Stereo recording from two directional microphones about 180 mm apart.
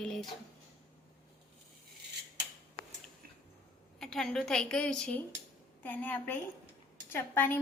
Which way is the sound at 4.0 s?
Centre (ahead or behind).